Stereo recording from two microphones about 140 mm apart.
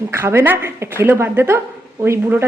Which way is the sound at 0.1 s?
15° right (ahead or behind).